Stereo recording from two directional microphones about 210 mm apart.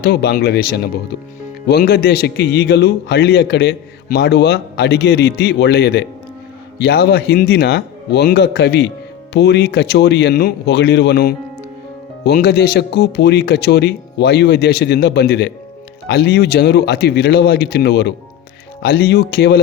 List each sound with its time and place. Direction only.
0.0 s speech: 50° left (ahead or behind)